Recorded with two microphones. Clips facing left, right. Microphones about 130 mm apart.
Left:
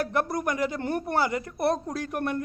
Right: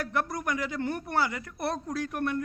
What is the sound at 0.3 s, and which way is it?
Speech, 40° left (ahead or behind).